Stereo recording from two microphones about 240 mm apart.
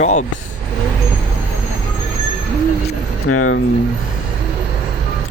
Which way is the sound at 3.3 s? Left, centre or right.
Left.